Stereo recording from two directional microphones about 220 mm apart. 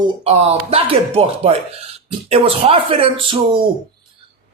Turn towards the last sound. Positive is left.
turn(degrees=-25)  # may be behind; listen again after turning